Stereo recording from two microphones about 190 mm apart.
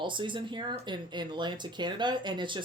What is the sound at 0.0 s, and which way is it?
Speech, 25° right (ahead or behind).